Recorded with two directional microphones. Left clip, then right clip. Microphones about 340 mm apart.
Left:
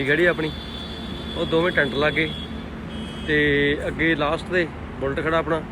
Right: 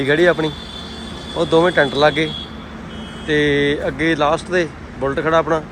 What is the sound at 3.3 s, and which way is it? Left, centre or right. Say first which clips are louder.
Speech: right 3 dB; centre.